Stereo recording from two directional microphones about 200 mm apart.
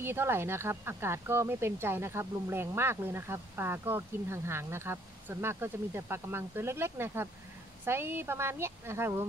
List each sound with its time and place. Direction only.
0.0 s speech: 10° right (ahead or behind)